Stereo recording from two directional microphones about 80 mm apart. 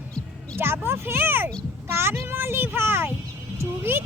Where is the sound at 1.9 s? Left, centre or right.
Right.